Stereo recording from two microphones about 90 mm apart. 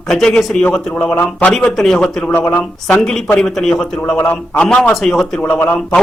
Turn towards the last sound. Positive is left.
turn(degrees=20)  # may be behind; listen again after turning